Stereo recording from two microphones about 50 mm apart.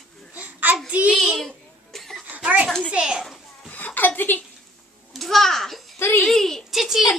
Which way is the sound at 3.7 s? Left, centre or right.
Left.